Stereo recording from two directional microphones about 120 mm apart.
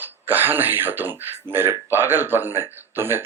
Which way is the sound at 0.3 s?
15° right (ahead or behind).